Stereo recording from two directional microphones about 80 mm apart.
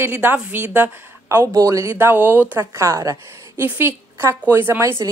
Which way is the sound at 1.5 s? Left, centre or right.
Right.